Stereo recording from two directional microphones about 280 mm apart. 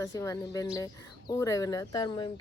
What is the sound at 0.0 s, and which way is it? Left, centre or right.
Speech, centre.